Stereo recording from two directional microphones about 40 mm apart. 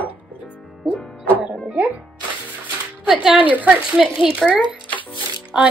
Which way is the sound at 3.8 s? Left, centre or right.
Centre.